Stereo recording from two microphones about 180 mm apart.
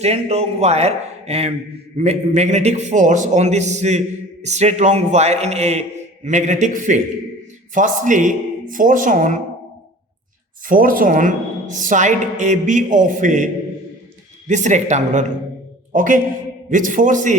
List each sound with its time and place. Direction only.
0.0 s a man's voice: 35° right (ahead or behind)
10.7 s a woman's voice: 50° right (ahead or behind)